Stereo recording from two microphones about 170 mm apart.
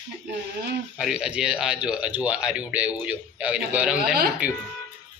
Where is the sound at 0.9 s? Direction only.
5° right (ahead or behind).